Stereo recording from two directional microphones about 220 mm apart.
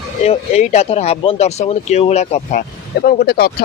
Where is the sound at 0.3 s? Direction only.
30° left (ahead or behind).